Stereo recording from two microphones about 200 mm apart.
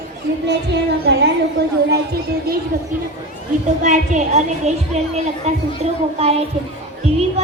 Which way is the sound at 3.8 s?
35° right (ahead or behind).